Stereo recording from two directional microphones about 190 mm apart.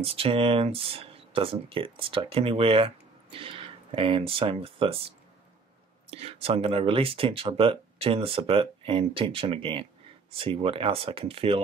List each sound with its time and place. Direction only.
0.0 s speech: 30° right (ahead or behind)